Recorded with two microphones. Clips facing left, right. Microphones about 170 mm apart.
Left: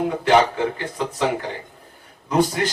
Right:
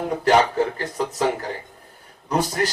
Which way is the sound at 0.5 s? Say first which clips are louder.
Right 2 dB; 40° right (ahead or behind).